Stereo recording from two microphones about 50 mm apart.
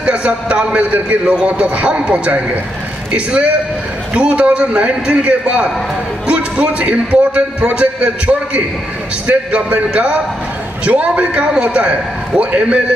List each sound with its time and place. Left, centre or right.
0.0 s a man's voice: right